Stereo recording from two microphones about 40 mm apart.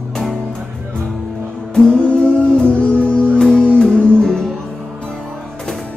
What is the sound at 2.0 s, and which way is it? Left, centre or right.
Music, left.